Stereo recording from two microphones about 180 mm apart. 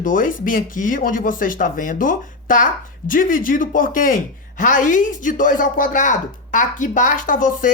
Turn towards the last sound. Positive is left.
turn(degrees=50)  # may be behind; listen again after turning